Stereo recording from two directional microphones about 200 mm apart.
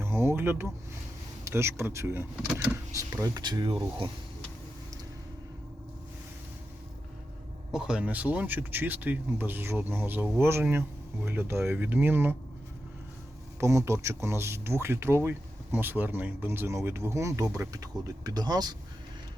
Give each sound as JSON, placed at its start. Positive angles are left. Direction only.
{"t": 0.0, "sound": "a sound", "side_deg": -10}
{"t": 1.5, "sound": "speech", "side_deg": -15}
{"t": 7.7, "sound": "speech", "side_deg": -5}
{"t": 13.6, "sound": "speech", "side_deg": -15}